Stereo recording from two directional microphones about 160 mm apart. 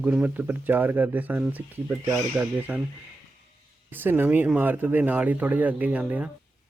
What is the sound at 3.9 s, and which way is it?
Speech, 15° right (ahead or behind).